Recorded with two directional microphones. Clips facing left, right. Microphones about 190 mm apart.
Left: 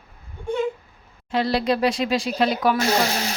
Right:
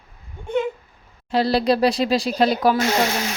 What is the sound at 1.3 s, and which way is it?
Speech, 35° right (ahead or behind).